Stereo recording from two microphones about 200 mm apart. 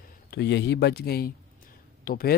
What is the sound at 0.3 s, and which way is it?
Speech, 55° left (ahead or behind).